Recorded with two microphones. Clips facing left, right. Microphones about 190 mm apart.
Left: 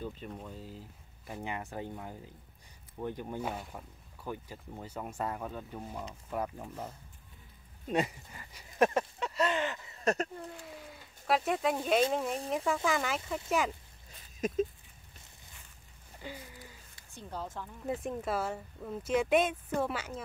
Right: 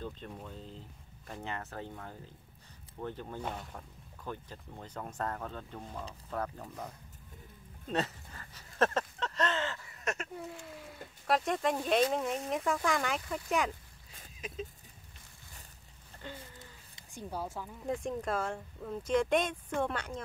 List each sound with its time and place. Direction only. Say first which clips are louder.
0.0 s speech: left 2 dB; 5° left (ahead or behind)
7.9 s a sound: left 3 dB; 10° left (ahead or behind)
10.0 s speech: left 7 dB; 35° left (ahead or behind)
10.3 s speech: right 1 dB; centre (ahead or behind)
14.4 s speech: left 11 dB; 45° left (ahead or behind)
16.2 s a sound: left 1 dB; 10° left (ahead or behind)
16.5 s livestock: left 2 dB; 15° right (ahead or behind)
17.8 s speech: even; 5° left (ahead or behind)